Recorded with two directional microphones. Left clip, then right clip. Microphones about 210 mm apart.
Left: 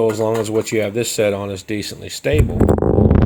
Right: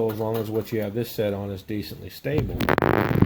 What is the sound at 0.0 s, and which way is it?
Speech, 35° left (ahead or behind).